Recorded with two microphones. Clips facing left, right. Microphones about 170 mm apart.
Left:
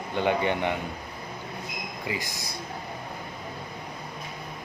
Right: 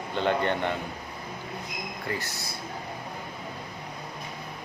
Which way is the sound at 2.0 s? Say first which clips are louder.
Left 1 dB; 15° left (ahead or behind).